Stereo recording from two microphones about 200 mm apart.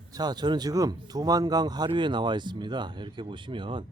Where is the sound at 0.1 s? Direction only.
20° right (ahead or behind).